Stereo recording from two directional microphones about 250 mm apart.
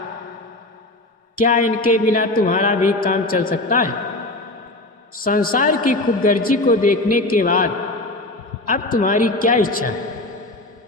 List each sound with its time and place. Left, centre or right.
1.4 s speech: left
5.2 s speech: left